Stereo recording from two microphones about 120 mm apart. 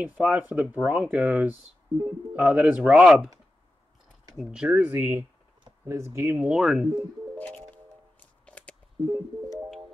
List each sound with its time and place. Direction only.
0.0 s speech: 10° right (ahead or behind)
4.4 s speech: 5° right (ahead or behind)
6.5 s speech: 5° right (ahead or behind)
7.3 s music: 10° left (ahead or behind)